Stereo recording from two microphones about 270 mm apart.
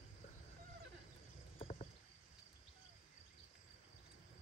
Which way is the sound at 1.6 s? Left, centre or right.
Left.